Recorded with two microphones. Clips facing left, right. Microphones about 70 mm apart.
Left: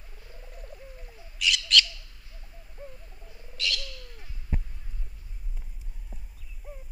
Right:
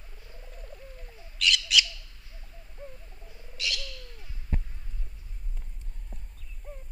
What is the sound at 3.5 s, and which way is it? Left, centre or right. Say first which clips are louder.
Owl: left 2 dB; centre.